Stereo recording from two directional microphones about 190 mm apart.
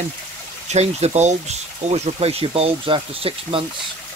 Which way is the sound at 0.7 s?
35° right (ahead or behind).